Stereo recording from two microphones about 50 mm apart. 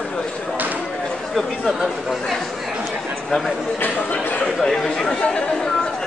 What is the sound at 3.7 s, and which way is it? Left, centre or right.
Speech, left.